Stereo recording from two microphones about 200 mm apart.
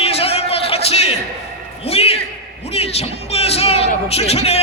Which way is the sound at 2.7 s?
30° left (ahead or behind).